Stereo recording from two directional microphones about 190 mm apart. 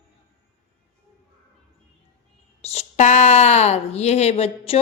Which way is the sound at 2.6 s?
35° left (ahead or behind).